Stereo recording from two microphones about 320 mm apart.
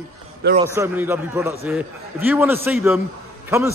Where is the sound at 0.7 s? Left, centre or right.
Centre.